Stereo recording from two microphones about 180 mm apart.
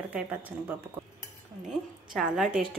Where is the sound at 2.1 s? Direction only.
Centre (ahead or behind).